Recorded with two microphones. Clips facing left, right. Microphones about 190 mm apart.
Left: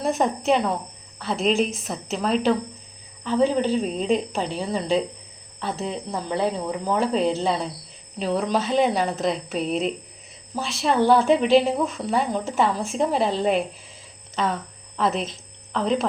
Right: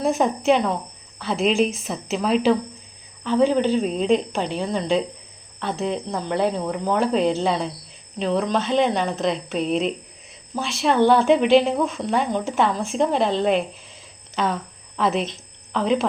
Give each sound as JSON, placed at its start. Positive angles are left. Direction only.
{"t": 0.0, "sound": "a woman's voice", "side_deg": 0}